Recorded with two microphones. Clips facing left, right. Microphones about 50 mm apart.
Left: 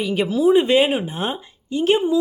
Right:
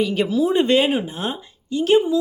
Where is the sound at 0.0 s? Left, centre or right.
Centre.